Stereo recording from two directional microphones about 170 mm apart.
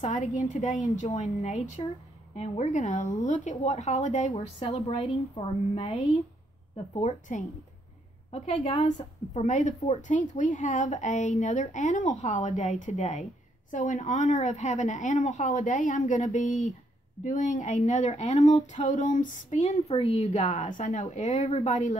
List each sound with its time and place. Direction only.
0.0 s a woman's voice: 45° left (ahead or behind)
4.4 s a woman's voice: 35° left (ahead or behind)
7.0 s a woman's voice: 45° left (ahead or behind)